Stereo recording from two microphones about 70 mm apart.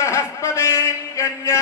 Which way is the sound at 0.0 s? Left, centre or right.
Left.